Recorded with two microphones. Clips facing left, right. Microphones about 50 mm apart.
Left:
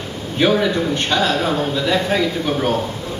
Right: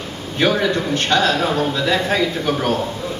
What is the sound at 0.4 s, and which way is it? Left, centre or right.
A man's voice, centre.